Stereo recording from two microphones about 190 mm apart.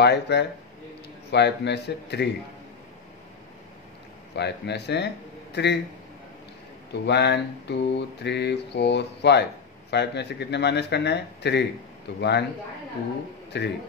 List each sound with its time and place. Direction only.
0.0 s mantra: 60° left (ahead or behind)
4.4 s speech: 60° left (ahead or behind)
6.9 s mantra: 60° left (ahead or behind)
13.5 s mantra: 65° left (ahead or behind)